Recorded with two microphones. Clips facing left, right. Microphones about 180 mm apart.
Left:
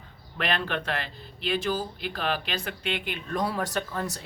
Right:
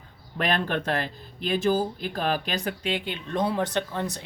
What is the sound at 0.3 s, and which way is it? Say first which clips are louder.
Speech: right 3 dB; 45° right (ahead or behind).